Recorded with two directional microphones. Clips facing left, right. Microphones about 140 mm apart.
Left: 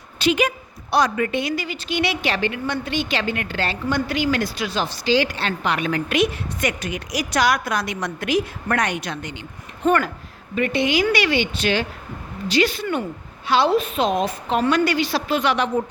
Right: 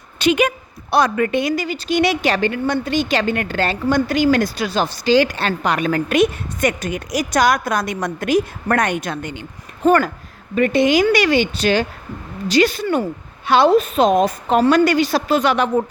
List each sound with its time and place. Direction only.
0.2 s a woman's voice: 60° right (ahead or behind)
9.8 s a woman's voice: 35° right (ahead or behind)